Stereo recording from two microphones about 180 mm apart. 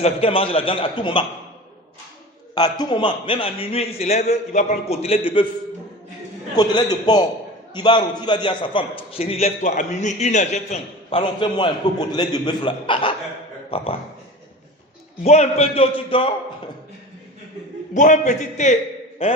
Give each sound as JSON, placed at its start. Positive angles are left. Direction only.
{"t": 0.0, "sound": "a man's voice", "side_deg": 30}
{"t": 2.6, "sound": "a man's voice", "side_deg": 25}
{"t": 6.6, "sound": "a man's voice", "side_deg": 20}
{"t": 11.1, "sound": "a man's voice", "side_deg": 30}
{"t": 15.2, "sound": "a man's voice", "side_deg": 35}
{"t": 17.9, "sound": "a man's voice", "side_deg": 45}